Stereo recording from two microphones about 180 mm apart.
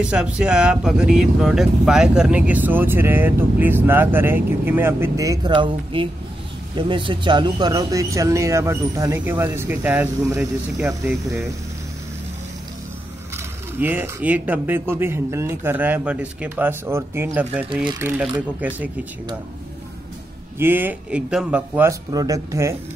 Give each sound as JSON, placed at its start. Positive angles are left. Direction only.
{"t": 0.0, "sound": "speech", "side_deg": -5}
{"t": 13.7, "sound": "speech", "side_deg": -10}
{"t": 20.5, "sound": "speech", "side_deg": -10}
{"t": 22.1, "sound": "speech", "side_deg": -20}